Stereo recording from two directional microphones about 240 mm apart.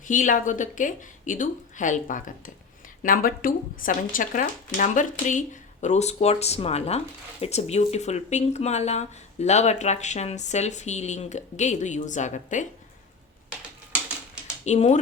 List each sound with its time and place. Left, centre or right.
0.0 s speech: left
14.6 s speech: left